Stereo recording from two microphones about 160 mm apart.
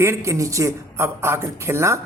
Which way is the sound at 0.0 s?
15° right (ahead or behind).